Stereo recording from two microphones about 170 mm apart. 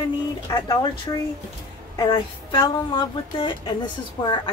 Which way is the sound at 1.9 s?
25° left (ahead or behind).